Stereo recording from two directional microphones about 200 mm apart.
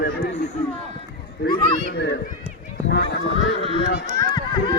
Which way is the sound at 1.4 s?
55° left (ahead or behind).